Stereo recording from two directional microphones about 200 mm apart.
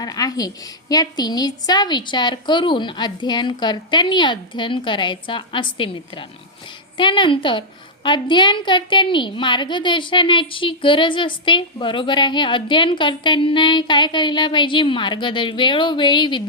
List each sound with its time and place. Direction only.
0.0 s a woman's voice: 20° left (ahead or behind)